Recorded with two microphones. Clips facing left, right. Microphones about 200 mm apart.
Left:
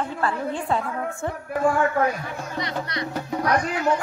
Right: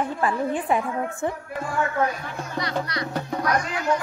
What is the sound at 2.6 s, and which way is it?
Speech, 20° left (ahead or behind).